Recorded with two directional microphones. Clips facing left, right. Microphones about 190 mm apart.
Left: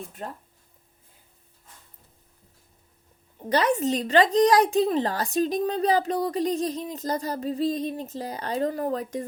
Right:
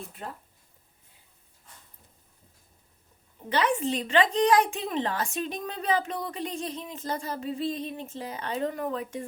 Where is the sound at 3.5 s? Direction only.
40° left (ahead or behind).